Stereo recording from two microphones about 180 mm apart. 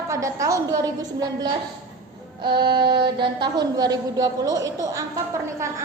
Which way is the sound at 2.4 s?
25° right (ahead or behind).